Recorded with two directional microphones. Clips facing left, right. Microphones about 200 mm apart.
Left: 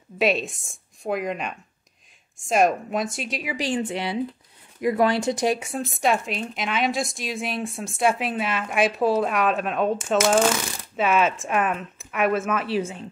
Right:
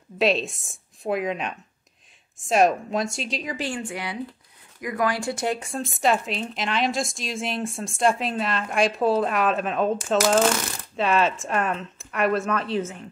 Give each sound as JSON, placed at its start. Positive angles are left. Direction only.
{"t": 0.2, "sound": "speech", "side_deg": 0}
{"t": 3.5, "sound": "a woman's voice", "side_deg": 20}